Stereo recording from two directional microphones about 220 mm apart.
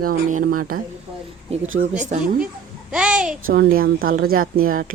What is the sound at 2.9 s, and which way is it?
Speech, 5° right (ahead or behind).